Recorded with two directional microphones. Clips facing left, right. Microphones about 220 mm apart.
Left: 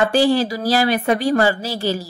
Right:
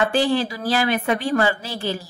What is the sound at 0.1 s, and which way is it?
A woman's voice, 40° left (ahead or behind).